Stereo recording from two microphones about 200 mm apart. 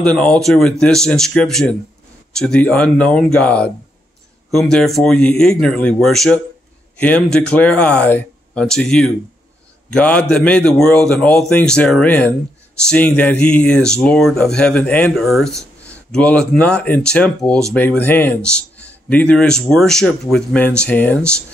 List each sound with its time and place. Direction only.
0.0 s speech: 5° left (ahead or behind)